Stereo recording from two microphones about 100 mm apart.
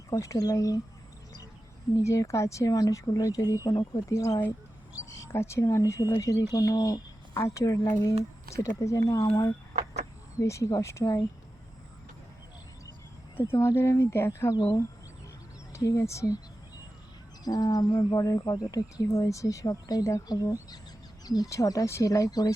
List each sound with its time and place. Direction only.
0.1 s speech: 35° left (ahead or behind)
2.0 s speech: 30° left (ahead or behind)
13.4 s speech: 25° left (ahead or behind)
14.5 s speech: 40° left (ahead or behind)
17.4 s speech: 40° left (ahead or behind)